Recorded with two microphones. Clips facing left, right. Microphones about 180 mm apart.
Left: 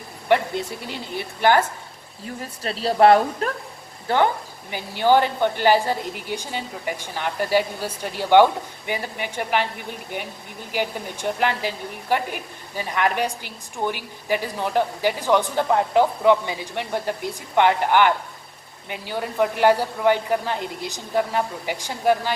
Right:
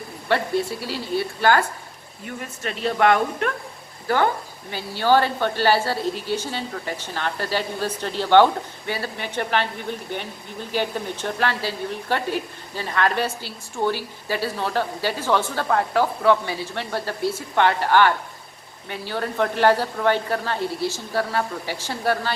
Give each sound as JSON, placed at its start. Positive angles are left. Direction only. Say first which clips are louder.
{"t": 0.3, "sound": "a woman's voice", "louder": "left 1 dB", "side_deg": 20}
{"t": 2.2, "sound": "speech", "louder": "left 1 dB", "side_deg": 35}
{"t": 4.1, "sound": "a woman's voice", "louder": "left 1 dB", "side_deg": 25}
{"t": 10.7, "sound": "a woman's voice", "louder": "right 1 dB", "side_deg": 15}